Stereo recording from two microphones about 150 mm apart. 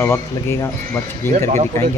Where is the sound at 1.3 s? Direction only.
50° right (ahead or behind).